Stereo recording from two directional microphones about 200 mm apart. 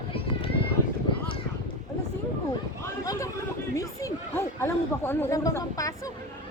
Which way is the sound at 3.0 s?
15° left (ahead or behind).